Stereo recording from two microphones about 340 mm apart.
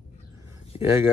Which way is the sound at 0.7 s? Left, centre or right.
Centre.